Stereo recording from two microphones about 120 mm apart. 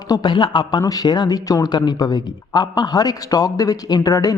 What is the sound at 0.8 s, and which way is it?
Speech, 30° left (ahead or behind).